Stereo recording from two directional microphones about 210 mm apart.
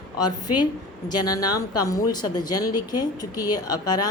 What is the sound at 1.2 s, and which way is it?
A woman's voice, 20° left (ahead or behind).